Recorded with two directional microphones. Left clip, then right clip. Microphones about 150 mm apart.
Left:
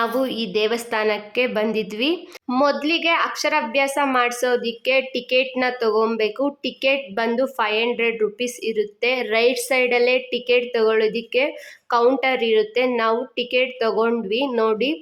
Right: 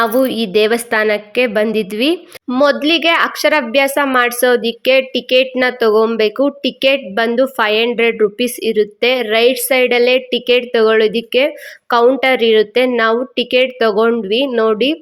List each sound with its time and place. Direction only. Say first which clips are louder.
0.0 s a woman's voice: right 8 dB; 30° right (ahead or behind)